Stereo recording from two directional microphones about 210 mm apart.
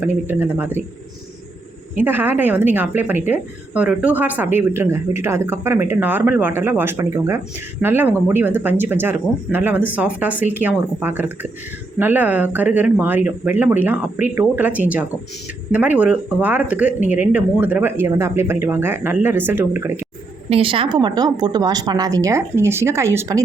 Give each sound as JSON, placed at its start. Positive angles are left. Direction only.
{"t": 0.0, "sound": "speech", "side_deg": -10}
{"t": 2.0, "sound": "speech", "side_deg": -10}
{"t": 20.5, "sound": "a woman's voice", "side_deg": -25}